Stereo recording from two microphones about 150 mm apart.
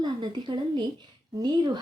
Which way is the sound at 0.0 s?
30° right (ahead or behind).